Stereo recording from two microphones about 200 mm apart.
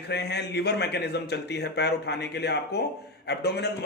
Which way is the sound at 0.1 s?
55° left (ahead or behind).